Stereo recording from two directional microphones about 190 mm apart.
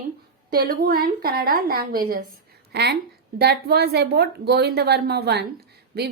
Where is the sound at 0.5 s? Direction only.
50° right (ahead or behind).